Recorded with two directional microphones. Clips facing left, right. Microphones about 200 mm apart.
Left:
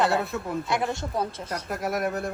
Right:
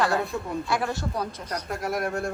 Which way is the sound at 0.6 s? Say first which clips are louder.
Even; 20° left (ahead or behind).